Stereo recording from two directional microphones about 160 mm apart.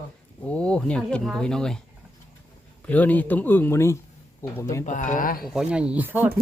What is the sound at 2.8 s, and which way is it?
Speech, 10° left (ahead or behind).